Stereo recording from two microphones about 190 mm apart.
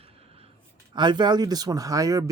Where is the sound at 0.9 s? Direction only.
25° right (ahead or behind).